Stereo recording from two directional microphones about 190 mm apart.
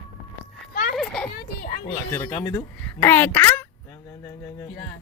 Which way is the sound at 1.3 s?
50° left (ahead or behind).